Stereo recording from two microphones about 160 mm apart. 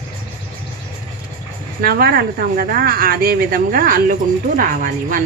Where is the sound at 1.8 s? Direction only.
70° right (ahead or behind).